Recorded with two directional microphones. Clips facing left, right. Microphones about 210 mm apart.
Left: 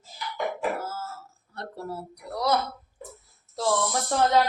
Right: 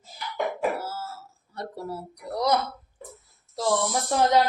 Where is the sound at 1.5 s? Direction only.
10° right (ahead or behind).